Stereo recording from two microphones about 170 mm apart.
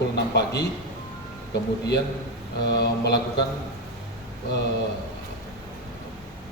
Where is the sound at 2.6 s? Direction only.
75° left (ahead or behind).